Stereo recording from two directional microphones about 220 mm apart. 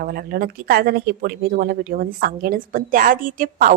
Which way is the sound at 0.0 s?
45° right (ahead or behind).